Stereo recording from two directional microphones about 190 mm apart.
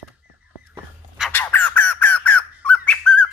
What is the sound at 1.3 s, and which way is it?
Bird, 10° left (ahead or behind).